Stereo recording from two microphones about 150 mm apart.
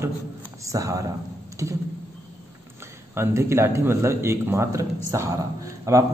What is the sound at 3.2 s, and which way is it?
A man's voice, 15° right (ahead or behind).